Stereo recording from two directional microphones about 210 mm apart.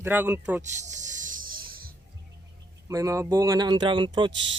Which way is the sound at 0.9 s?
40° right (ahead or behind).